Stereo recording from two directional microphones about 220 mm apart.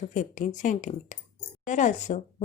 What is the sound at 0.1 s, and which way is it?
Speech, 35° left (ahead or behind).